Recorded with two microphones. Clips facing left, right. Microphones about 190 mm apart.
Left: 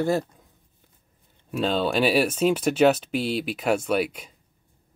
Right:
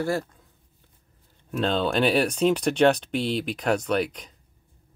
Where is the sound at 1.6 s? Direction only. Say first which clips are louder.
Even; 5° left (ahead or behind).